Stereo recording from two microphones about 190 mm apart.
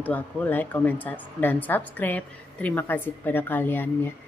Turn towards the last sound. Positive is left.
turn(degrees=10)  # may be behind; listen again after turning